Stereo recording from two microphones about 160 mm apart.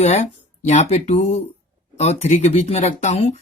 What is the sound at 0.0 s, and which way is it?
Speech, 45° left (ahead or behind).